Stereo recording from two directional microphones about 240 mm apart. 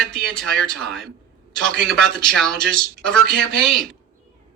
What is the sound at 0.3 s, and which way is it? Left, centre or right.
Speech, centre.